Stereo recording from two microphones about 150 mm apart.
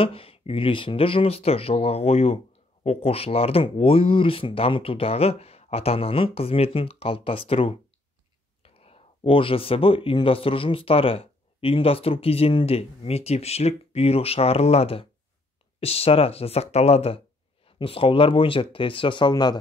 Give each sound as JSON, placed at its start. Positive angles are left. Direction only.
{"t": 0.0, "sound": "speech", "side_deg": 40}